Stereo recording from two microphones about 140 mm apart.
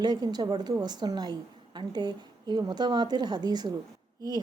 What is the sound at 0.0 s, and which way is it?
A woman's voice, 30° right (ahead or behind).